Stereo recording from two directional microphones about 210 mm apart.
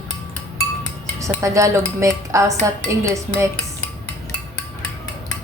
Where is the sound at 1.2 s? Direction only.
15° right (ahead or behind).